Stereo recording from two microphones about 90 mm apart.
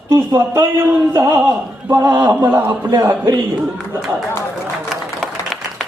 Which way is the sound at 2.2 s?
20° right (ahead or behind).